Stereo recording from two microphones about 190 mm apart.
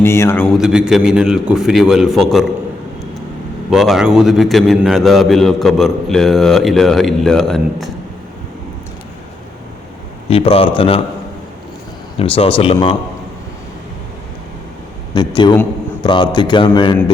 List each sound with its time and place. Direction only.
0.0 s a man's voice: 15° left (ahead or behind)
3.7 s a man's voice: centre (ahead or behind)
10.2 s a man's voice: 30° left (ahead or behind)
12.2 s a man's voice: 30° left (ahead or behind)
15.1 s a man's voice: 25° left (ahead or behind)